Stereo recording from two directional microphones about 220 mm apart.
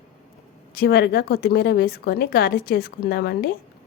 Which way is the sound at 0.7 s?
45° left (ahead or behind).